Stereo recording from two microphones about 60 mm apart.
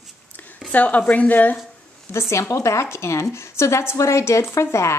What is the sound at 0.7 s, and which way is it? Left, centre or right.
Speech, left.